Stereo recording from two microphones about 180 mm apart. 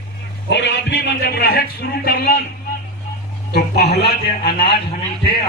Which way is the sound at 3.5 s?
60° left (ahead or behind).